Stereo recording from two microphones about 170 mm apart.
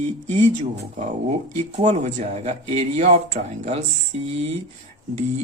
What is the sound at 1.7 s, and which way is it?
Speech, 40° right (ahead or behind).